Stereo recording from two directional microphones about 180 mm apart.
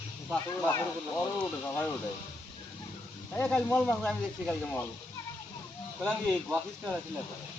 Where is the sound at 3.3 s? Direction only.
5° left (ahead or behind).